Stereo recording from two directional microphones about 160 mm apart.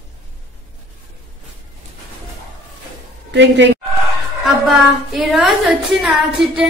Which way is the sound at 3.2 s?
90° right.